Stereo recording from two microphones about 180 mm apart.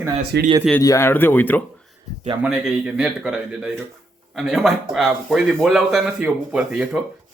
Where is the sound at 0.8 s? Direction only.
15° left (ahead or behind).